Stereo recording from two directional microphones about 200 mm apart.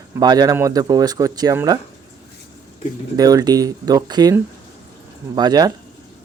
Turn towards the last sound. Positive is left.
turn(degrees=-20)  # may be behind; listen again after turning